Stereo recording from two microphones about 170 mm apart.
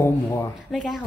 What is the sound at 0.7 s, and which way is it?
Speech, centre (ahead or behind).